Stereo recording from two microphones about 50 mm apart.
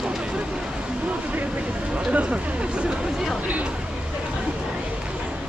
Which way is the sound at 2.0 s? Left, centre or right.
Right.